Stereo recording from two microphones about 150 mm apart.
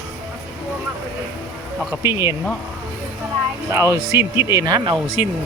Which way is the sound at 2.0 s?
20° right (ahead or behind).